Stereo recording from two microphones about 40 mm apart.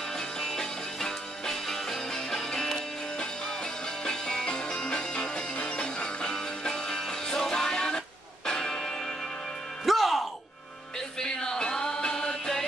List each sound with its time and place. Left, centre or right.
0.1 s music: centre
9.8 s music: centre
11.0 s music: centre